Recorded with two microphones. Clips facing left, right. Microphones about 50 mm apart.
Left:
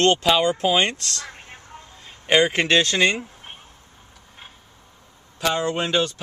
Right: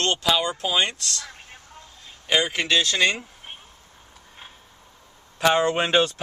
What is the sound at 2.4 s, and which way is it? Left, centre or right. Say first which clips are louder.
Speech: left 3 dB; left.